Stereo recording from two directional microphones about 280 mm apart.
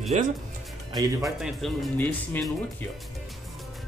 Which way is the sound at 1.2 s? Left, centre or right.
Centre.